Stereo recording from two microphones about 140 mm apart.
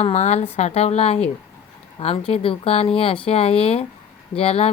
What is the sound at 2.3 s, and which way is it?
Speech, 45° left (ahead or behind).